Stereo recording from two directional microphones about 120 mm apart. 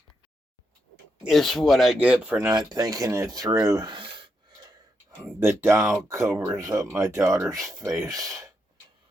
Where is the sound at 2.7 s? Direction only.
30° right (ahead or behind).